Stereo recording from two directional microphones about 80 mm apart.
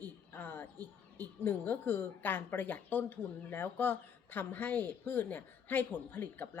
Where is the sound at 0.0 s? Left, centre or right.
Left.